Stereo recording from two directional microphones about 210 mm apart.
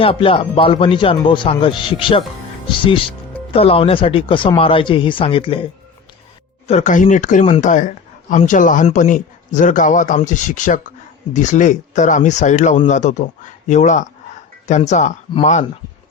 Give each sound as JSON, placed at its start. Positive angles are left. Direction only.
{"t": 0.0, "sound": "speech", "side_deg": 25}
{"t": 6.7, "sound": "a man's voice", "side_deg": 35}